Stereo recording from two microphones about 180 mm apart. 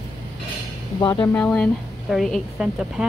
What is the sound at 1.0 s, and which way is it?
Speech, 20° left (ahead or behind).